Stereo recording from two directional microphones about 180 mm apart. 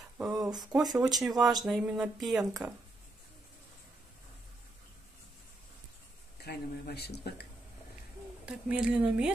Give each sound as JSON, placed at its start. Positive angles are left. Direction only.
{"t": 0.4, "sound": "a sound", "side_deg": -20}
{"t": 0.7, "sound": "speech", "side_deg": -5}
{"t": 6.4, "sound": "speech", "side_deg": 60}
{"t": 8.5, "sound": "speech", "side_deg": -5}